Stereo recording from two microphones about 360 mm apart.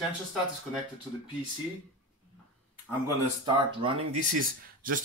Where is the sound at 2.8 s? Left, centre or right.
Centre.